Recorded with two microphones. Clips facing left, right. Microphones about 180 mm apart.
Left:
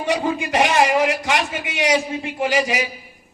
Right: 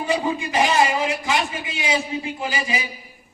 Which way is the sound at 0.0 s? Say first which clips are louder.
Left 2 dB; 80° left.